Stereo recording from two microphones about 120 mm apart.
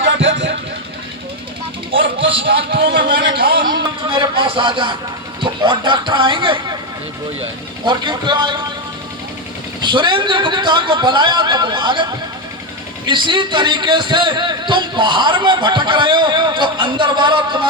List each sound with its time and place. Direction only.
1.9 s a sound: 50° right (ahead or behind)
3.1 s a man's voice: 40° right (ahead or behind)
7.9 s a man's voice: 40° right (ahead or behind)
9.8 s a man's voice: 40° right (ahead or behind)
13.1 s a man's voice: 40° right (ahead or behind)